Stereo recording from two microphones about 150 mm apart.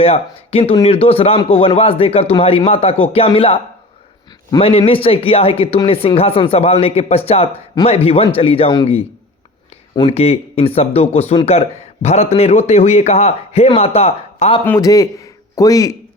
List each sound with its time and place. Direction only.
0.0 s speech: 40° left (ahead or behind)
0.6 s speech: 30° left (ahead or behind)
0.9 s speech: 40° left (ahead or behind)
9.9 s speech: 35° left (ahead or behind)
14.8 s a man's voice: 25° left (ahead or behind)